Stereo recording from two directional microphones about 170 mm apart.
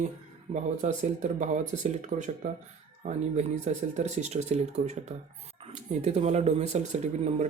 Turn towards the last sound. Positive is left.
turn(degrees=-45)  # may be behind; listen again after turning